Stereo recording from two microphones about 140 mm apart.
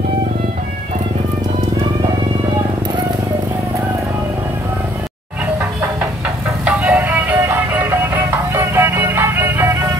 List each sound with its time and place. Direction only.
6.6 s music: 10° right (ahead or behind)